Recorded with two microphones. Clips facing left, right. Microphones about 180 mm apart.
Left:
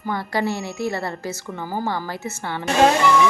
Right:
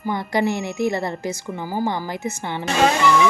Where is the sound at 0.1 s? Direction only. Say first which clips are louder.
Right 2 dB; 20° right (ahead or behind).